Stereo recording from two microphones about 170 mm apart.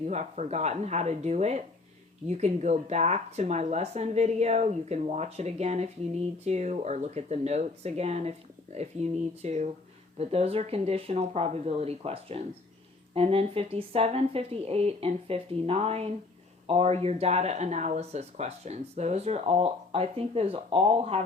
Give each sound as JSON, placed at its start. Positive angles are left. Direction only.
{"t": 0.0, "sound": "speech", "side_deg": -40}